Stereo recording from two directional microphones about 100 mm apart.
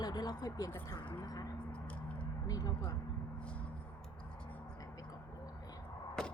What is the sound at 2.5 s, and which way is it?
Speech, 40° left (ahead or behind).